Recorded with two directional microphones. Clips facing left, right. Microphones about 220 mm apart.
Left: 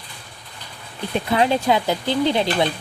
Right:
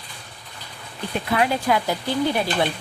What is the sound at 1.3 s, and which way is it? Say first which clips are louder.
Speech: left 2 dB; 25° left (ahead or behind).